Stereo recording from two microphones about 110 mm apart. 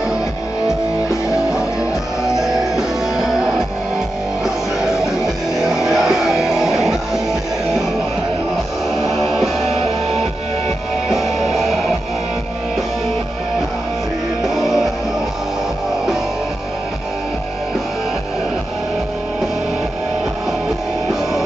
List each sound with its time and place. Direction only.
2.3 s music: 5° right (ahead or behind)
4.8 s music: 5° right (ahead or behind)
9.1 s music: centre (ahead or behind)
9.7 s music: 75° right (ahead or behind)
11.1 s music: centre (ahead or behind)